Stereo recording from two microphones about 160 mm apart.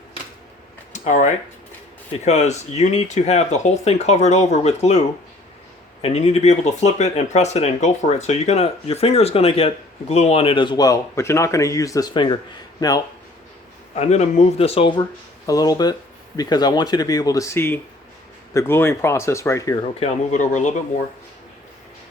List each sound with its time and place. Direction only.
0.9 s speech: 45° left (ahead or behind); by 12.4 s 30° left (ahead or behind)
13.9 s speech: 45° left (ahead or behind); by 19.8 s 20° left (ahead or behind)
19.9 s speech: 40° left (ahead or behind)